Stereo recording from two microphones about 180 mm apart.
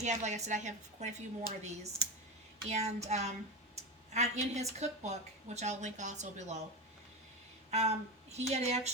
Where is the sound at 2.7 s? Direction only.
40° right (ahead or behind).